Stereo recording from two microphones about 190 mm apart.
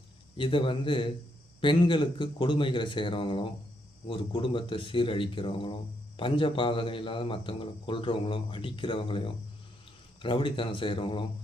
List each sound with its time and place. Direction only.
0.3 s a man's voice: 25° left (ahead or behind)